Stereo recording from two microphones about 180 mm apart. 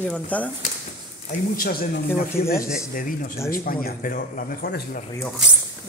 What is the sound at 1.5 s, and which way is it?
Speech, 50° left (ahead or behind).